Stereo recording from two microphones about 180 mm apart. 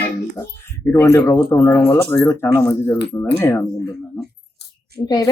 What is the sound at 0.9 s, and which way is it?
Speech, 15° left (ahead or behind).